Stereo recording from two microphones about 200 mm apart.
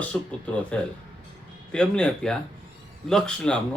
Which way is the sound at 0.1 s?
5° left (ahead or behind).